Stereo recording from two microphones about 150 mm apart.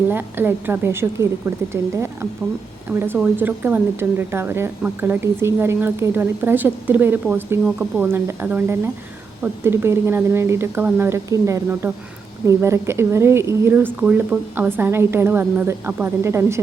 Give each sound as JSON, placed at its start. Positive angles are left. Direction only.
{"t": 0.1, "sound": "speech", "side_deg": -15}
{"t": 3.2, "sound": "speech", "side_deg": -10}